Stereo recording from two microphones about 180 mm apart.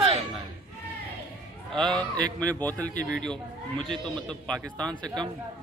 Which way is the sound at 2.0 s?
20° right (ahead or behind).